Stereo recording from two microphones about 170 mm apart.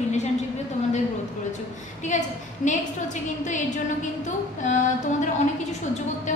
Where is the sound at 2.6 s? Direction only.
45° left (ahead or behind).